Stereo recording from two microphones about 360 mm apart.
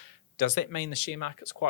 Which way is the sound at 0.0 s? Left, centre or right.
Left.